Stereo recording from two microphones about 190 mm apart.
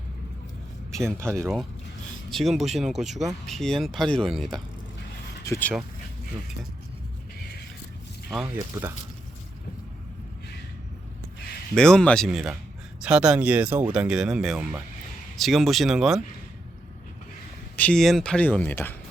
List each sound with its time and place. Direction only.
1.0 s speech: 15° right (ahead or behind)
1.4 s speech: centre (ahead or behind)
8.8 s speech: 20° right (ahead or behind)
11.7 s speech: 5° left (ahead or behind)
17.7 s speech: 5° left (ahead or behind)